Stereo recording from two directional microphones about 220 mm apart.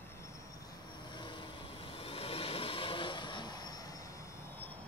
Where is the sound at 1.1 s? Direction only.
20° left (ahead or behind).